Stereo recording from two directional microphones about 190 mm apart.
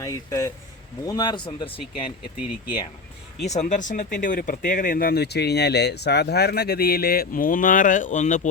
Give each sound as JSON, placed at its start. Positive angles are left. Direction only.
{"t": 0.0, "sound": "a man's voice", "side_deg": 15}
{"t": 3.4, "sound": "speech", "side_deg": 35}